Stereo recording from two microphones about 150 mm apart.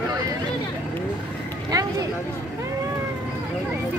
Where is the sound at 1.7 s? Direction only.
25° right (ahead or behind).